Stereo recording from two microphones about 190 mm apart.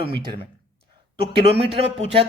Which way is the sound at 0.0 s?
25° right (ahead or behind).